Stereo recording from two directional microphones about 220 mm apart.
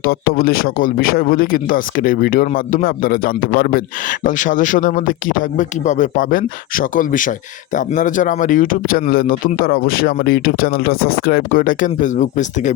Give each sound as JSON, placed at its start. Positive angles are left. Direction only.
{"t": 0.0, "sound": "a man's voice", "side_deg": 40}